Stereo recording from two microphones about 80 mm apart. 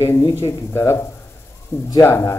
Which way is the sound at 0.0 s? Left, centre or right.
Left.